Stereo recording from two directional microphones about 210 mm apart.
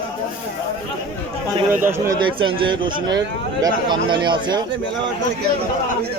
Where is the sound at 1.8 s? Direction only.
10° right (ahead or behind).